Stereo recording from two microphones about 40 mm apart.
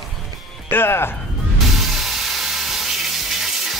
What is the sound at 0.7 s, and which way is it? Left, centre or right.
Speech, left.